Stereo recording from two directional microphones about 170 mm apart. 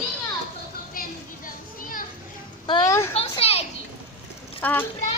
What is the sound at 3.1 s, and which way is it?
Children playing, 35° left (ahead or behind).